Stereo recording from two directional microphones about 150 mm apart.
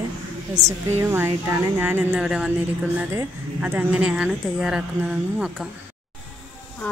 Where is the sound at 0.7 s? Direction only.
15° right (ahead or behind).